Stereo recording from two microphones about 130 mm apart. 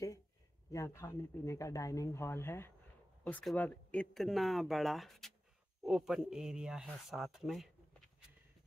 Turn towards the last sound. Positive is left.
turn(degrees=0)  # may be behind; listen again after turning